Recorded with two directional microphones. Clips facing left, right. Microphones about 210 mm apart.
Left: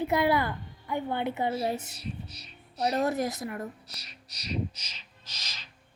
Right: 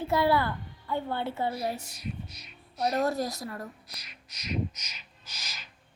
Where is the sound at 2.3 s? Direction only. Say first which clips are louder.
Left 1 dB; 35° left (ahead or behind).